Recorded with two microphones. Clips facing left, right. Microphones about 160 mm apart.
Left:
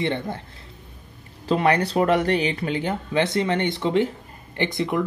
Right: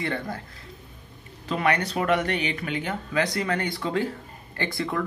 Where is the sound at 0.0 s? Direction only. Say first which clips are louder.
Left 4 dB; 25° left (ahead or behind).